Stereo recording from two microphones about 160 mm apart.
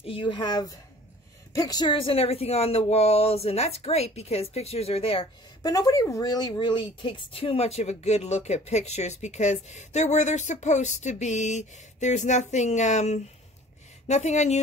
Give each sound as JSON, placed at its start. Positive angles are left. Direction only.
{"t": 0.0, "sound": "speech", "side_deg": 35}
{"t": 5.6, "sound": "speech", "side_deg": 20}